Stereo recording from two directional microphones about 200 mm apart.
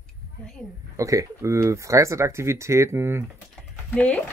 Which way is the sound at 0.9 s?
15° right (ahead or behind).